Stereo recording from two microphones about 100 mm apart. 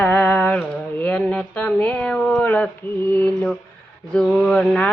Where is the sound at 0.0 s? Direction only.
20° left (ahead or behind).